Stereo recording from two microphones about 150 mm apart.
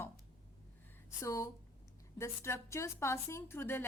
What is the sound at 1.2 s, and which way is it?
A woman's voice, 20° left (ahead or behind).